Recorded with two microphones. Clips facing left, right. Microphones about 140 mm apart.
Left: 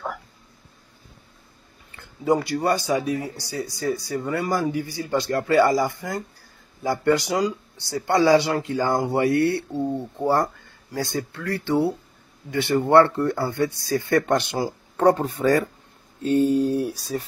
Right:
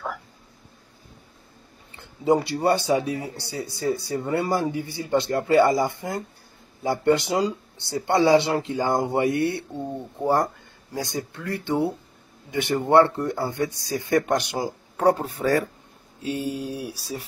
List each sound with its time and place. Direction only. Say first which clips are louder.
2.0 s speech: right 1 dB; 25° right (ahead or behind); by 17.0 s 10° right (ahead or behind)